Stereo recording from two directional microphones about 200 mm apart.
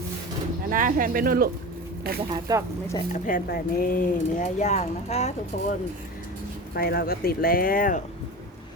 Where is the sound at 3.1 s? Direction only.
45° left (ahead or behind).